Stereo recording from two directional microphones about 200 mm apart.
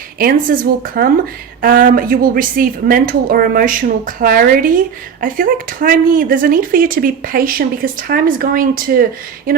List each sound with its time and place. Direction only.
0.2 s speech: 45° right (ahead or behind)